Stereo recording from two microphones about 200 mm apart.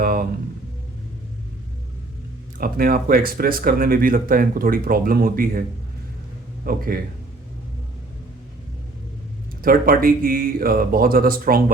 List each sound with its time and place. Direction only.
0.0 s a sound: 45° right (ahead or behind)
2.6 s speech: 45° right (ahead or behind)
6.7 s speech: 45° right (ahead or behind)
9.6 s speech: 45° right (ahead or behind)